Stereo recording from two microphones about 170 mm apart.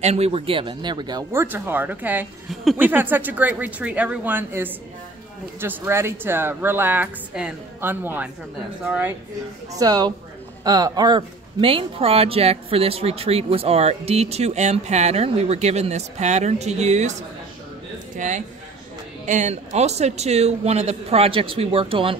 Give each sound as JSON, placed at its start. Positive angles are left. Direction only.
{"t": 0.0, "sound": "a woman's voice", "side_deg": -40}
{"t": 9.7, "sound": "a man's voice", "side_deg": -20}